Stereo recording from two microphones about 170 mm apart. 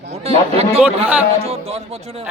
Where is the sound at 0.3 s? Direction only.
35° right (ahead or behind).